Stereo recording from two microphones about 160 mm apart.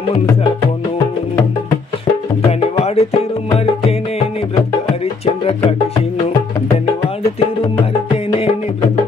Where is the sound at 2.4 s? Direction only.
40° left (ahead or behind).